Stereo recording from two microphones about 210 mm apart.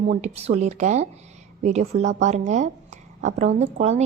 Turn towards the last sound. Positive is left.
turn(degrees=-30)  # may be behind; listen again after turning